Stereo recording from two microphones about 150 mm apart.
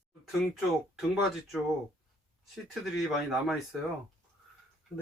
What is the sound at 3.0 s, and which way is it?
Speech, 5° right (ahead or behind).